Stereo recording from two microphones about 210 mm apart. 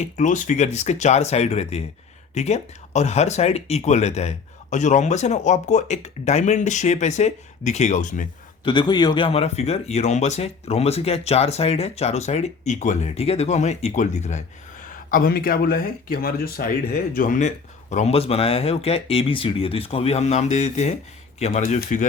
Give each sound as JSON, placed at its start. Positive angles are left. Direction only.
{"t": 0.0, "sound": "speech", "side_deg": 35}
{"t": 8.6, "sound": "speech", "side_deg": 20}